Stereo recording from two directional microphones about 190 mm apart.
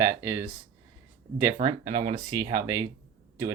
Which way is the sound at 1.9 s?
30° right (ahead or behind).